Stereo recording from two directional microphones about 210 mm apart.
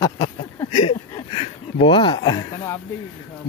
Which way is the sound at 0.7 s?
30° left (ahead or behind).